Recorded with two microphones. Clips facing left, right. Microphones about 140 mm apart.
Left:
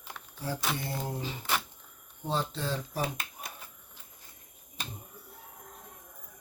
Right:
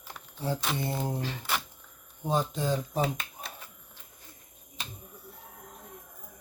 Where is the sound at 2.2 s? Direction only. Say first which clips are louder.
Right 4 dB; 15° right (ahead or behind).